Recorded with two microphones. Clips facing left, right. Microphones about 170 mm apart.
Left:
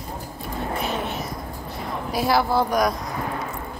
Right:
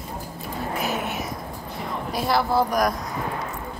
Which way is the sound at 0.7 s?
5° right (ahead or behind).